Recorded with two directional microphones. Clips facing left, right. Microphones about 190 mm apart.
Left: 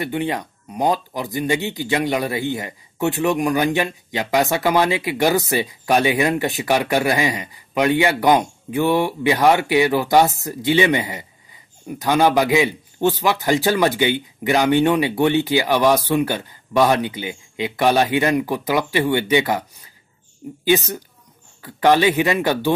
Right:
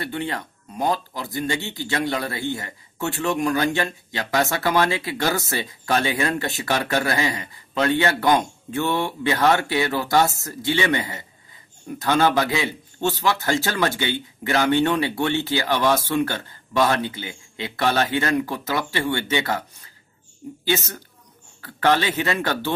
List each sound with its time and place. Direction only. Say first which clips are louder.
0.0 s speech: left 5 dB; 15° left (ahead or behind)
20.6 s speech: left 6 dB; 15° left (ahead or behind)